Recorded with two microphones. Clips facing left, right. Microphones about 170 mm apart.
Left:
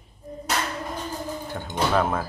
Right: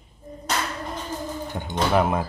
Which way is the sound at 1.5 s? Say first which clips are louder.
Right 1 dB; 15° right (ahead or behind).